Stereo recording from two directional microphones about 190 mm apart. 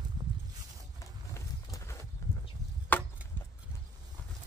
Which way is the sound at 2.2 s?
15° left (ahead or behind).